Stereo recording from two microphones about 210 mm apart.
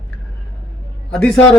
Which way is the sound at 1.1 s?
5° left (ahead or behind).